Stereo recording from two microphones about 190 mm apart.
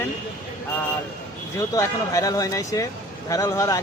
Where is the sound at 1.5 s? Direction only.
15° left (ahead or behind).